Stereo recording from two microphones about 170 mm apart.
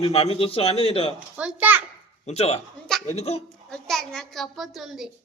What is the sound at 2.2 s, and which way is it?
A man's voice, 40° left (ahead or behind).